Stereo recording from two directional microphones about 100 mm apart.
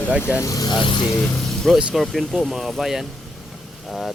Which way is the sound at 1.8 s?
10° right (ahead or behind).